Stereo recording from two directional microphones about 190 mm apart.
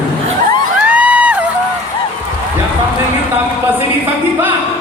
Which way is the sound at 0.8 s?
5° right (ahead or behind).